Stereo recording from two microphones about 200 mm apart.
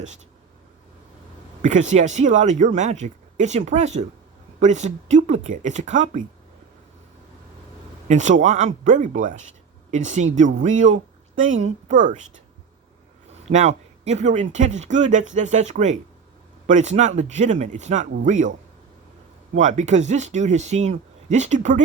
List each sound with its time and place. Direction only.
1.6 s speech: 35° right (ahead or behind)
8.0 s speech: 35° right (ahead or behind)
10.6 s speech: 40° right (ahead or behind)
13.4 s speech: 35° right (ahead or behind)
19.5 s speech: 35° right (ahead or behind)